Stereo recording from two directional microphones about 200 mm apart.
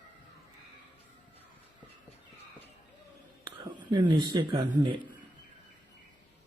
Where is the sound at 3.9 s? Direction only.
25° right (ahead or behind).